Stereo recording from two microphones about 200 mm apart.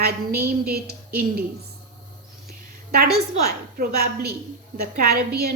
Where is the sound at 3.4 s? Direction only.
50° right (ahead or behind).